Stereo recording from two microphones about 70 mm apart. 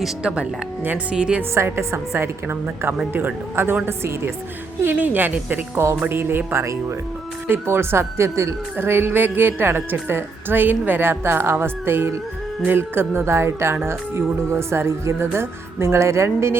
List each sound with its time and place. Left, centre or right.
0.2 s speech: centre
1.5 s a woman's voice: right
4.8 s a woman's voice: right
5.7 s a woman's voice: right